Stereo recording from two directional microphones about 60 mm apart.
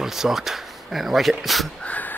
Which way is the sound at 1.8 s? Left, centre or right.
Left.